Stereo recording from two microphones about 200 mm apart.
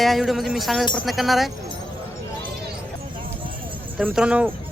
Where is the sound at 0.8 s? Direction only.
20° left (ahead or behind).